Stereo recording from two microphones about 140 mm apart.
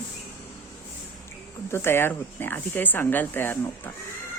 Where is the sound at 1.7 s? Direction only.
15° left (ahead or behind).